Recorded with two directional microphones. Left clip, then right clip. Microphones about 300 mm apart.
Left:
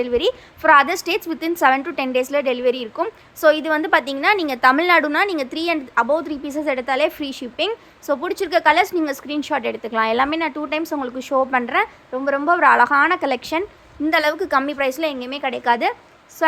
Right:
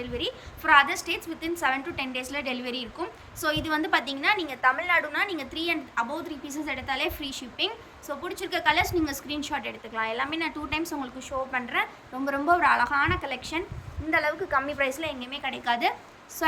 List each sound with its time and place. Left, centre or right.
0.0 s a woman's voice: centre